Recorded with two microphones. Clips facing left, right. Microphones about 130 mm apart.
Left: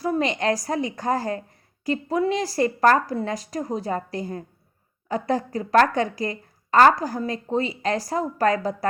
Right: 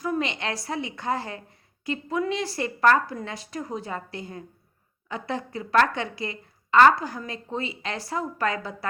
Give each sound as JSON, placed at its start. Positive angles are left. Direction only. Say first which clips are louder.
{"t": 0.0, "sound": "a woman's voice", "louder": "left 5 dB", "side_deg": 35}